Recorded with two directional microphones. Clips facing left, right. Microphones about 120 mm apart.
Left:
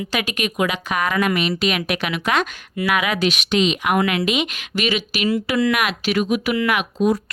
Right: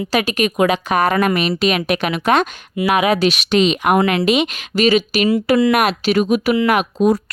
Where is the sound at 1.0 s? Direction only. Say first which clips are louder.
Right 1 dB; 50° right (ahead or behind).